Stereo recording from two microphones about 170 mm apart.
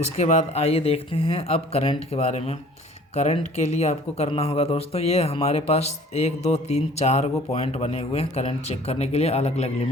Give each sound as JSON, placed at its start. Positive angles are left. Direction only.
{"t": 0.2, "sound": "speech", "side_deg": 40}